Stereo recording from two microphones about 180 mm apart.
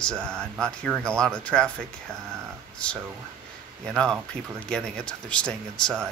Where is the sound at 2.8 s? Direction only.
5° left (ahead or behind).